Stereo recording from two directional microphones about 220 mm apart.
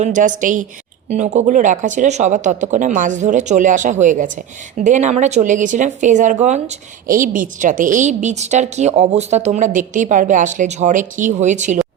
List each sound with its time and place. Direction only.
0.0 s a woman's voice: 35° right (ahead or behind)